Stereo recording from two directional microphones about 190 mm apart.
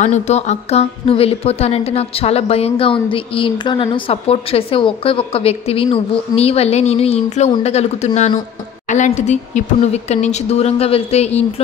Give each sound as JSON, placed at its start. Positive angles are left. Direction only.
{"t": 0.0, "sound": "a woman's voice", "side_deg": 35}
{"t": 8.8, "sound": "a sound", "side_deg": 40}
{"t": 9.2, "sound": "a woman's voice", "side_deg": 35}